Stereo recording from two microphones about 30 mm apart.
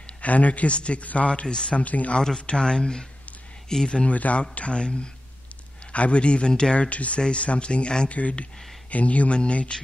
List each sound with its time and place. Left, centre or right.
0.2 s speech: left
1.8 s speech: left
2.1 s speech: left
4.1 s speech: left
4.4 s speech: left
7.2 s speech: left
8.1 s speech: left
9.3 s speech: left